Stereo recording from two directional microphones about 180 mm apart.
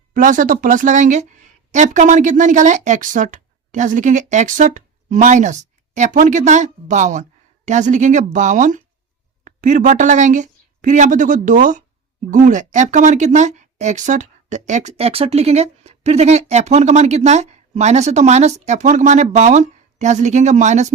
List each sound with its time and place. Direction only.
0.1 s a woman's voice: 50° right (ahead or behind)